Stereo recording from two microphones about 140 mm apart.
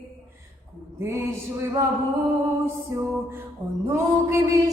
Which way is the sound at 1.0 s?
20° right (ahead or behind).